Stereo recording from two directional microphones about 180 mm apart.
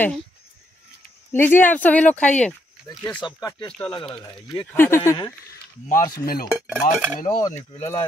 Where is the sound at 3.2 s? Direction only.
20° left (ahead or behind).